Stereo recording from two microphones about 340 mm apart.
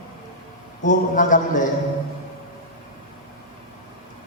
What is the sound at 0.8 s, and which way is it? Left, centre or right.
Speech, left.